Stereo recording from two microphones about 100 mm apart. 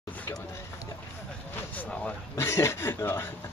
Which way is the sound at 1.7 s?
15° left (ahead or behind).